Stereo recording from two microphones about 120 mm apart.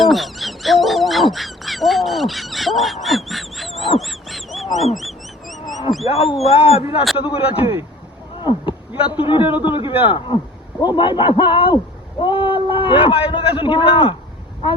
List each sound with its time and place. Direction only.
0.0 s bird: centre (ahead or behind)
4.9 s a sound: centre (ahead or behind)
6.1 s a man's voice: 55° left (ahead or behind)